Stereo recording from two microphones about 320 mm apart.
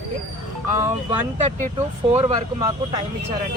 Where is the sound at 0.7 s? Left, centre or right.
Centre.